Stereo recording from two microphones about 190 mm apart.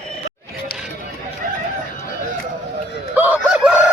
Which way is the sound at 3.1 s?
10° right (ahead or behind).